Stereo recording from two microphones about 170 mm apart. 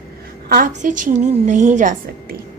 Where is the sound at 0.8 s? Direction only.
45° right (ahead or behind).